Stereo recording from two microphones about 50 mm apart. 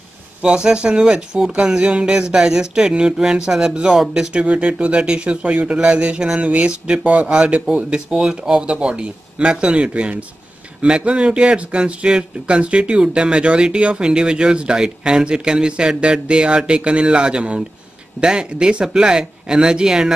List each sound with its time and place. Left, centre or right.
0.4 s speech: centre
4.3 s speech: right